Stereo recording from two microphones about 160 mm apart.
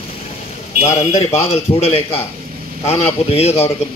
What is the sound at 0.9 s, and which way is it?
A man's voice, 40° left (ahead or behind).